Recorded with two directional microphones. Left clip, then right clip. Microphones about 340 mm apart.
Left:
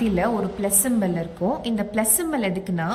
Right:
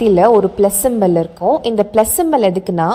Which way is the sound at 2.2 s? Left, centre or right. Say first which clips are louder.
Right 12 dB; centre.